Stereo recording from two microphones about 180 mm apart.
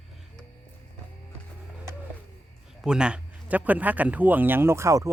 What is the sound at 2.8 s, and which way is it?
Speech, 5° right (ahead or behind).